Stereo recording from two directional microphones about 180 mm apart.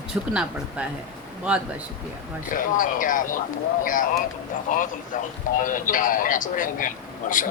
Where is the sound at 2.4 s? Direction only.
50° left (ahead or behind).